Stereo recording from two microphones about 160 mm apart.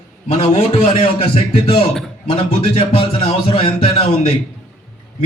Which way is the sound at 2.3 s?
35° left (ahead or behind).